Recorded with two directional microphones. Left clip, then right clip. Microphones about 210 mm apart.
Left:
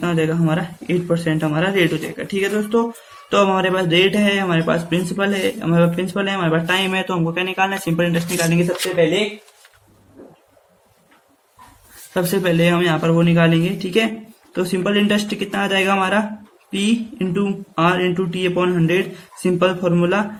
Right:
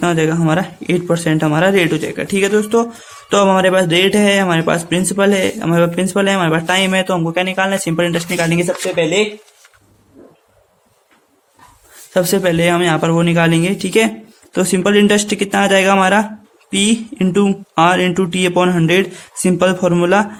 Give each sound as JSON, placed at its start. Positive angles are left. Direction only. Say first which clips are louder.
{"t": 0.0, "sound": "a man's voice", "louder": "right 5 dB", "side_deg": -50}
{"t": 12.1, "sound": "a man's voice", "louder": "right 4 dB", "side_deg": -40}